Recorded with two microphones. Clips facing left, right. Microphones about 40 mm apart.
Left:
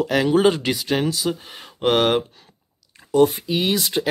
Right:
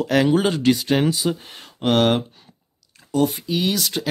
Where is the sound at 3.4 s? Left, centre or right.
Centre.